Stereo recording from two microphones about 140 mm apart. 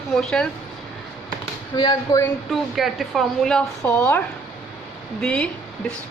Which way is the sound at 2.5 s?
Centre (ahead or behind).